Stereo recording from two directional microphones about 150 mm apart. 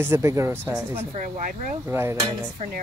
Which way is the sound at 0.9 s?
50° right (ahead or behind).